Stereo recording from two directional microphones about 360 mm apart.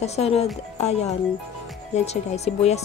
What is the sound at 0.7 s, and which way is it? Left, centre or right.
Music, centre.